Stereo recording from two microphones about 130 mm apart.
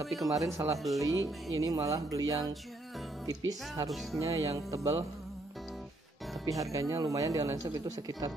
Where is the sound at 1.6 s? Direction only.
25° right (ahead or behind).